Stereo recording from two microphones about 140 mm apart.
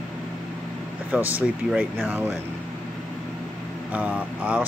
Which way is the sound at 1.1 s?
10° right (ahead or behind).